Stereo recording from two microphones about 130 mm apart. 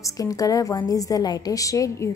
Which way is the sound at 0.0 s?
25° left (ahead or behind).